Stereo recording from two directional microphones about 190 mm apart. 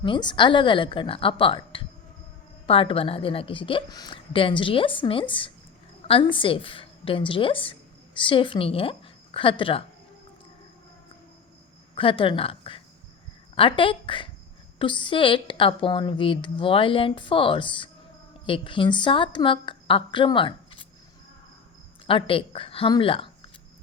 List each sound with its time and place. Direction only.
0.0 s a woman's voice: 25° left (ahead or behind)
11.9 s a woman's voice: 25° left (ahead or behind)
22.0 s speech: 30° left (ahead or behind)